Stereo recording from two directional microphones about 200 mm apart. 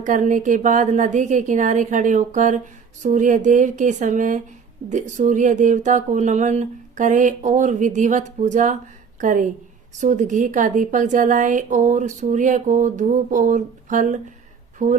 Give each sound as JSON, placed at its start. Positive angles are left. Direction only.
{"t": 0.0, "sound": "a woman's voice", "side_deg": -40}